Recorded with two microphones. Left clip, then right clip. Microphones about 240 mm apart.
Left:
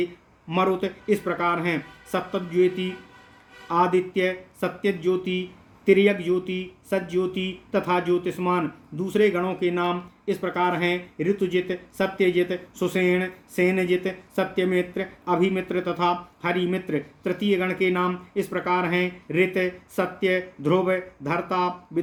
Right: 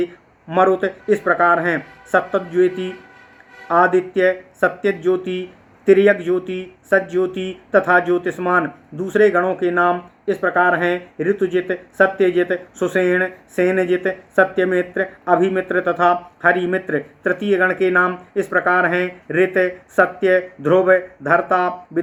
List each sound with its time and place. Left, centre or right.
0.5 s speech: left